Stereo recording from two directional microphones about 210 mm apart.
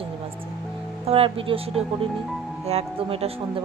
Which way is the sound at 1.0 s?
25° right (ahead or behind).